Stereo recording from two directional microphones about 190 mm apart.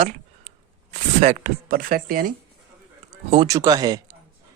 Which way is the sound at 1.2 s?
40° right (ahead or behind).